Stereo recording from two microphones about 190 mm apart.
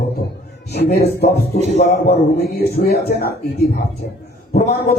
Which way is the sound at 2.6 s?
50° left (ahead or behind).